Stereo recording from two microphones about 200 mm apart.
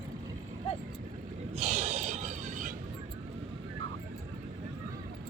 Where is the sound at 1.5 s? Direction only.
35° right (ahead or behind).